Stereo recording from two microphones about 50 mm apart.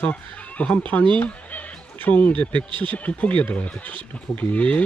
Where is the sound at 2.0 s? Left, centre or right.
Left.